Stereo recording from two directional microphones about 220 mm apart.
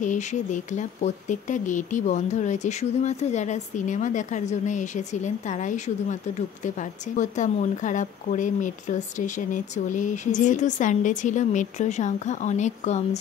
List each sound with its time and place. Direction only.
0.0 s speech: 35° left (ahead or behind)